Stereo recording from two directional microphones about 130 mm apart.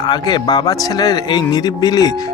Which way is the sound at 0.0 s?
35° left (ahead or behind).